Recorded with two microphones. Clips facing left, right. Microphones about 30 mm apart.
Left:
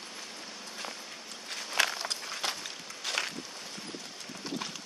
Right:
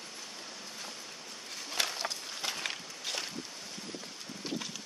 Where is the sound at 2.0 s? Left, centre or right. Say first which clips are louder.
Left 2 dB; left.